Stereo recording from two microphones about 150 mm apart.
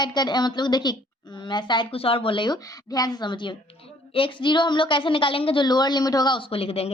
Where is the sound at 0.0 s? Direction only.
30° left (ahead or behind).